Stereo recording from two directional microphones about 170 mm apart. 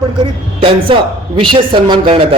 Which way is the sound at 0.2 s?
30° right (ahead or behind).